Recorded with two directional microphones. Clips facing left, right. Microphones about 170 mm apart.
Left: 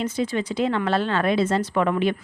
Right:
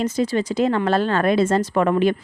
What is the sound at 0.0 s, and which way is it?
Speech, 40° right (ahead or behind).